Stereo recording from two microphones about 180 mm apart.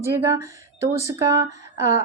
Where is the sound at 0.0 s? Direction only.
15° right (ahead or behind).